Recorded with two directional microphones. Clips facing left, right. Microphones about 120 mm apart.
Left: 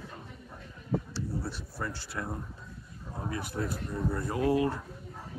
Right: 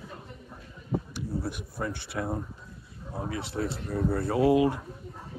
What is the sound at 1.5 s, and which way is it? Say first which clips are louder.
Speech: right 4 dB; 15° right (ahead or behind).